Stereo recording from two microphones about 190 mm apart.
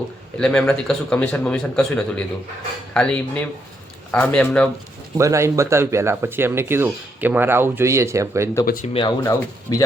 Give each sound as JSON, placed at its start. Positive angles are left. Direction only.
{"t": 0.3, "sound": "a man's voice", "side_deg": 5}
{"t": 5.1, "sound": "speech", "side_deg": -15}
{"t": 8.6, "sound": "speech", "side_deg": 50}
{"t": 8.9, "sound": "speech", "side_deg": 25}